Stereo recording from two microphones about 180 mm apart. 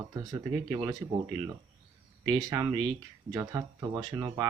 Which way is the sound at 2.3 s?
20° right (ahead or behind).